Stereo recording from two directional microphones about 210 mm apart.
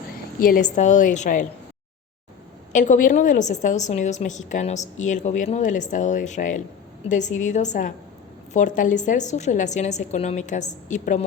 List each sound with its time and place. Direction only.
0.3 s a woman's voice: 40° left (ahead or behind)
2.7 s a woman's voice: 35° left (ahead or behind)